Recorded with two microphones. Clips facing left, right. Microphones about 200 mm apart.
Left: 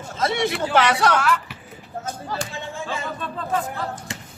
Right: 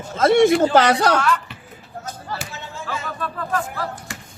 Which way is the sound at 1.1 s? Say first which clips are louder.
Right 1 dB; 10° left (ahead or behind).